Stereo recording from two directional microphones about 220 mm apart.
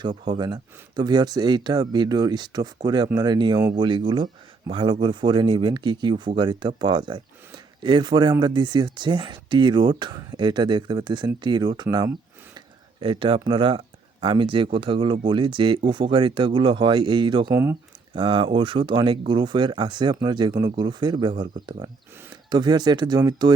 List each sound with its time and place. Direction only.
0.3 s speech: 20° right (ahead or behind)
17.5 s speech: 10° right (ahead or behind)
18.1 s speech: 20° right (ahead or behind)